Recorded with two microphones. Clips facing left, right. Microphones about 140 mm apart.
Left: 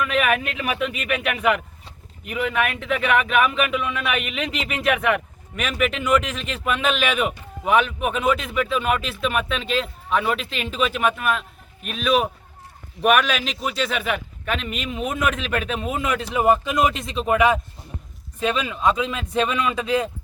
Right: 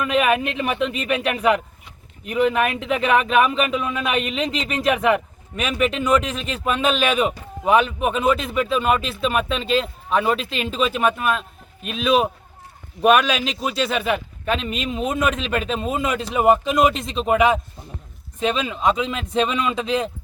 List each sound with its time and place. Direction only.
0.0 s speech: 30° right (ahead or behind)